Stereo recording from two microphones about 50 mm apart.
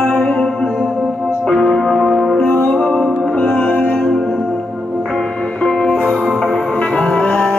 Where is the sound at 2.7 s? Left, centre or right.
Centre.